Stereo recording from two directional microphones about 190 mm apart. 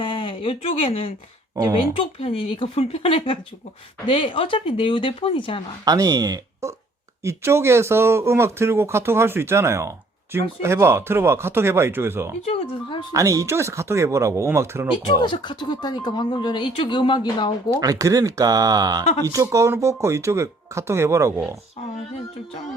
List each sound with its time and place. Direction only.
0.0 s speech: 25° left (ahead or behind)
5.8 s speech: 20° right (ahead or behind)
15.2 s speech: 25° left (ahead or behind)
17.7 s speech: 20° right (ahead or behind)